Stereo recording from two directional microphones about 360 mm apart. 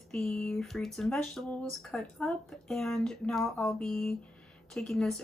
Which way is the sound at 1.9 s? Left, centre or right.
Centre.